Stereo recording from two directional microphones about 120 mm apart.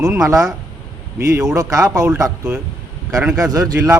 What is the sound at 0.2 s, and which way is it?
Speech, 25° right (ahead or behind).